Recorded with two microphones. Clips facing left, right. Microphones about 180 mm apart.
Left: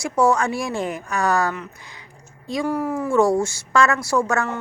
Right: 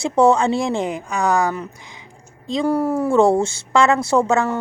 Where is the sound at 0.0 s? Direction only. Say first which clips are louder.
Right 4 dB; 25° right (ahead or behind).